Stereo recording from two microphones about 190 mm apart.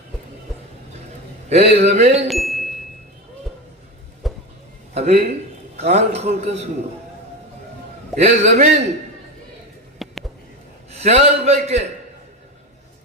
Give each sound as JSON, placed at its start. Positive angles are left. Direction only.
{"t": 1.5, "sound": "a man's voice", "side_deg": -35}
{"t": 2.2, "sound": "a sound", "side_deg": 0}
{"t": 4.2, "sound": "vehicle", "side_deg": 0}
{"t": 4.9, "sound": "a man's voice", "side_deg": -35}
{"t": 8.1, "sound": "a man's voice", "side_deg": -35}
{"t": 10.0, "sound": "a sound", "side_deg": 0}
{"t": 10.9, "sound": "a man's voice", "side_deg": -35}